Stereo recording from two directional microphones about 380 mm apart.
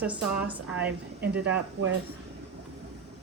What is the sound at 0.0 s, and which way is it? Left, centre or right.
Speech, centre.